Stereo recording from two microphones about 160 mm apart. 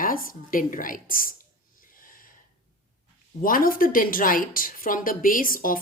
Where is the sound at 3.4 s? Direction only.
60° left (ahead or behind).